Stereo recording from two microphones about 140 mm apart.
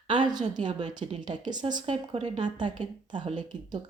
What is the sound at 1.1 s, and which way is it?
Speech, 60° right (ahead or behind).